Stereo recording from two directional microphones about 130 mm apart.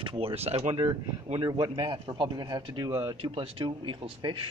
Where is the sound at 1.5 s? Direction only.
35° right (ahead or behind).